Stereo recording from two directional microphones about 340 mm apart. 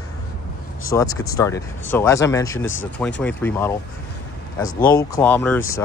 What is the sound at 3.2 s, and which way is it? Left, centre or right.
Speech, centre.